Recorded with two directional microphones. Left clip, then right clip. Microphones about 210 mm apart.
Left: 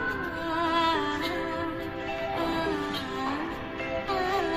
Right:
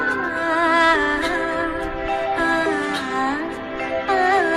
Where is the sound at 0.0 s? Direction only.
35° right (ahead or behind).